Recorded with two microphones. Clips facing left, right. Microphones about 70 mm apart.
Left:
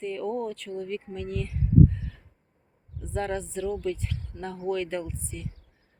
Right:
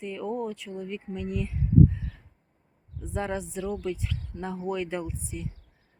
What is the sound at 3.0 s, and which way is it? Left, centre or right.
Speech, centre.